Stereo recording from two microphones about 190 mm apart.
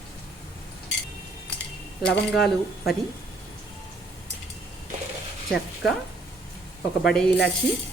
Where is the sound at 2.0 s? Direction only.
5° left (ahead or behind).